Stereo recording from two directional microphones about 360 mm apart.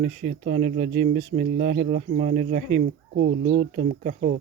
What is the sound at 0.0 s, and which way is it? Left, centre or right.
Speech, right.